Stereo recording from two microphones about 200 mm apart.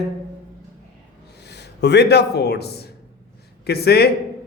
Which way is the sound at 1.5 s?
55° left (ahead or behind).